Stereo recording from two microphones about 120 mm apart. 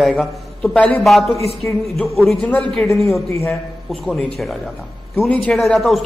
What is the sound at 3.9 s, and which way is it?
A man's voice, 10° left (ahead or behind).